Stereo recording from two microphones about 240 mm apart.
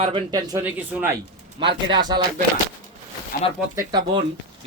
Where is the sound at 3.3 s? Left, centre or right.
Left.